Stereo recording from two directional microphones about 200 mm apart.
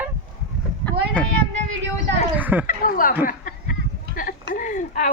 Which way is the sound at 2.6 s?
45° left (ahead or behind).